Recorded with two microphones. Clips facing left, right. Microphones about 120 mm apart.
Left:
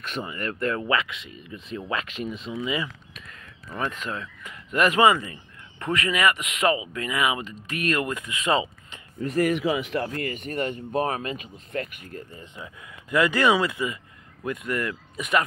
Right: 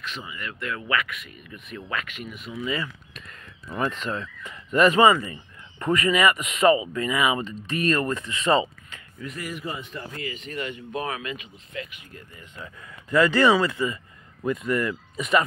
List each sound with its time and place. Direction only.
0.0 s speech: 50° left (ahead or behind); by 2.9 s 15° left (ahead or behind)
3.9 s speech: 5° left (ahead or behind)
9.4 s speech: 70° left (ahead or behind); by 10.0 s 90° left
10.1 s speech: 55° left (ahead or behind)
12.6 s speech: 10° left (ahead or behind)